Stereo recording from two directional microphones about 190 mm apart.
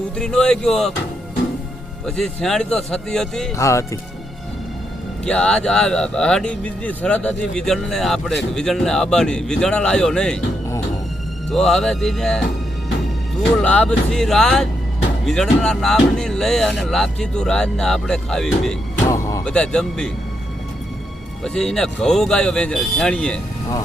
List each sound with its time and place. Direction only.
0.2 s speech: 5° left (ahead or behind)
2.0 s speech: centre (ahead or behind)
3.5 s speech: 15° left (ahead or behind)
5.2 s speech: 5° left (ahead or behind)
11.5 s speech: 5° left (ahead or behind)
13.6 s speech: 5° left (ahead or behind)
19.1 s music: 15° left (ahead or behind)
19.5 s speech: 5° left (ahead or behind)
21.4 s speech: 5° left (ahead or behind)